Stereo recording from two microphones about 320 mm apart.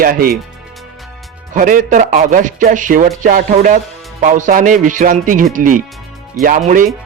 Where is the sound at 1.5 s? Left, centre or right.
Right.